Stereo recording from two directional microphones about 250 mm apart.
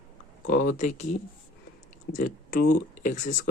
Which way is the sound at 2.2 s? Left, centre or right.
Left.